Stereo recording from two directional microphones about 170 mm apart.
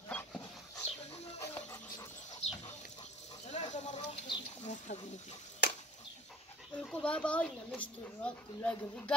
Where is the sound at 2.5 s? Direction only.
40° left (ahead or behind).